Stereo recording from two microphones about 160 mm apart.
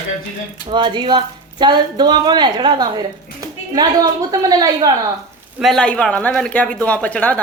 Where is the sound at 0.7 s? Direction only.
30° right (ahead or behind).